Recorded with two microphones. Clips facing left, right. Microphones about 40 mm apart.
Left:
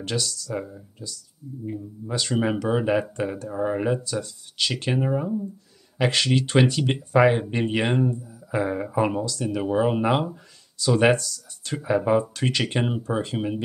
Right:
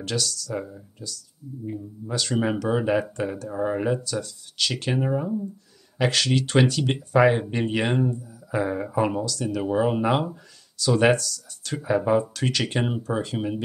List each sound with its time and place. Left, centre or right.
0.0 s speech: centre
4.0 s speech: centre
6.0 s speech: centre
11.1 s speech: centre
11.8 s speech: centre